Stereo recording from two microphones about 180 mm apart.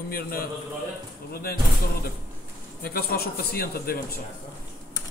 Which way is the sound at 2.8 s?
60° left (ahead or behind).